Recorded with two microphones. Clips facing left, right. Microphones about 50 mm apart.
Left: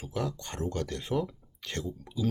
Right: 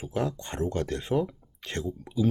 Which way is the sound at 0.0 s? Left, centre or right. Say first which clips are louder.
Right 4 dB; right.